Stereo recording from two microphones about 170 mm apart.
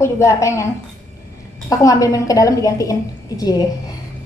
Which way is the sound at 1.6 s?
20° left (ahead or behind).